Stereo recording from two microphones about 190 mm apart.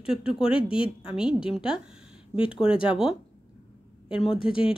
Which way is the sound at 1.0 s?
5° right (ahead or behind).